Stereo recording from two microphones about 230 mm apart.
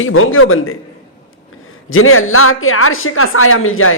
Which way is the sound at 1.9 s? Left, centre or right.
Left.